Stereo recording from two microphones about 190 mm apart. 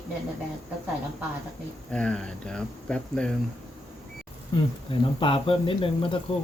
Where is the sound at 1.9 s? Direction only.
5° left (ahead or behind).